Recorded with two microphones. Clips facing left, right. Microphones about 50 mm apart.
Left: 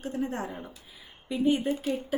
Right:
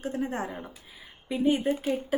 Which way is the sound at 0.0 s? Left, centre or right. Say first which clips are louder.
Right 1 dB; centre.